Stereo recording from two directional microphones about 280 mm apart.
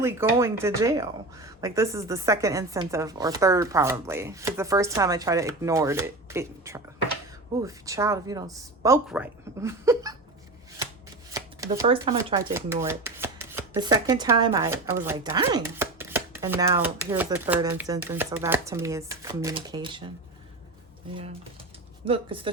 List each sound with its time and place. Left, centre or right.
0.0 s speech: centre
11.3 s speech: centre
22.0 s speech: centre